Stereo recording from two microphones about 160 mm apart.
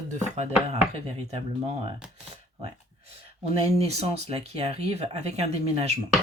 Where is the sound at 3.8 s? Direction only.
40° right (ahead or behind).